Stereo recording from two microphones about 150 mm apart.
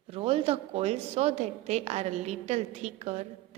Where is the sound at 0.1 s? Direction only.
40° right (ahead or behind).